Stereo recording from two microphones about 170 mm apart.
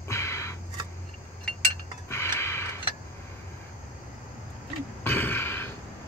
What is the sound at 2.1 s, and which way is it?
Tick-tock, 15° left (ahead or behind).